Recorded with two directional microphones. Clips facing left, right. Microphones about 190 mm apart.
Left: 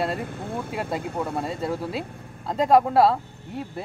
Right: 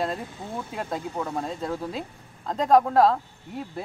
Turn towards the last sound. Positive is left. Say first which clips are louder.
# left 1 dB
turn(degrees=5)  # may be behind; listen again after turning